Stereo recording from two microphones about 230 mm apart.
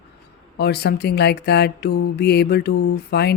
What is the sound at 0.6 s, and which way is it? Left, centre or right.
Speech, left.